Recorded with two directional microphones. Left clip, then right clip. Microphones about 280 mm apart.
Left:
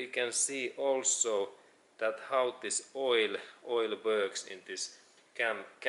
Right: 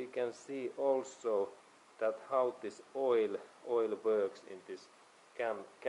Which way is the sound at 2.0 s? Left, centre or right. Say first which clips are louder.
Left 2 dB; centre.